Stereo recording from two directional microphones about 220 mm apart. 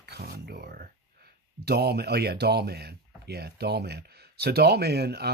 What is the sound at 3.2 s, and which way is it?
Speech, 45° right (ahead or behind).